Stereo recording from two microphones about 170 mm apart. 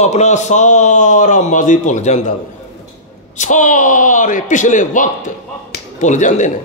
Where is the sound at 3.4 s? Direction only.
45° left (ahead or behind).